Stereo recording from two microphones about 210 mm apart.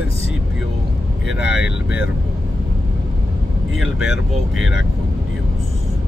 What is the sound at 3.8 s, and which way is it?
Speech, 5° right (ahead or behind).